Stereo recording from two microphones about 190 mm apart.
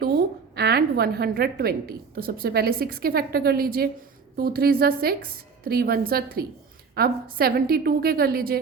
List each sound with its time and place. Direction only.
0.0 s a woman's voice: 55° right (ahead or behind)